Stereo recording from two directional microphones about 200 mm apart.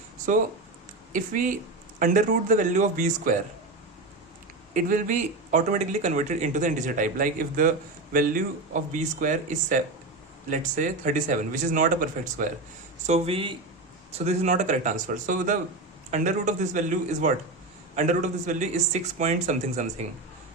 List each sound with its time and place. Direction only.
1.1 s speech: 40° right (ahead or behind)
4.7 s speech: 40° right (ahead or behind)